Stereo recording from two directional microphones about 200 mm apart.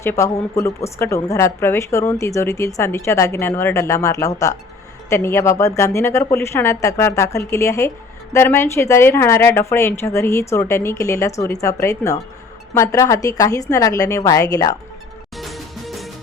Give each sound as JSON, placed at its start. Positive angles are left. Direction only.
{"t": 0.0, "sound": "a woman's voice", "side_deg": 15}
{"t": 15.4, "sound": "music", "side_deg": 0}